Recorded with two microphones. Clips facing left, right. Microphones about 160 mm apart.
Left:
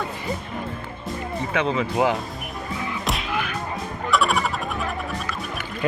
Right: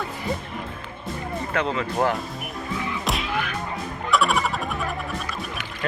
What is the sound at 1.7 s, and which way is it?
Speech, 10° left (ahead or behind).